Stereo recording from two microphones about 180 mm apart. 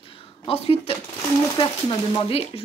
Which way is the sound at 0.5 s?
35° left (ahead or behind).